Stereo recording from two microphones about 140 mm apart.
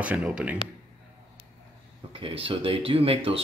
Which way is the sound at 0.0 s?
10° right (ahead or behind).